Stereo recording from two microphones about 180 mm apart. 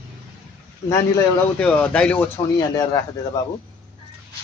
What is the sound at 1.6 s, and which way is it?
Speech, 5° left (ahead or behind).